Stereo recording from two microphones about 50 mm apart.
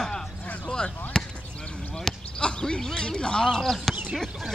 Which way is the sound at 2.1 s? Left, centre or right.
Centre.